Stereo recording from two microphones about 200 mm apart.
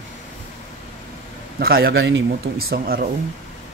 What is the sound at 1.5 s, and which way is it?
Speech, 50° right (ahead or behind).